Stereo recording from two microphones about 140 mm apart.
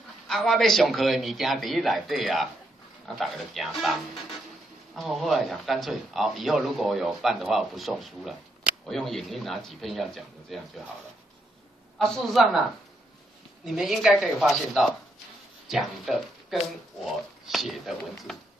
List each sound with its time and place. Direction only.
0.3 s a man's voice: centre (ahead or behind)
12.0 s a man's voice: centre (ahead or behind)
13.7 s a man's voice: centre (ahead or behind)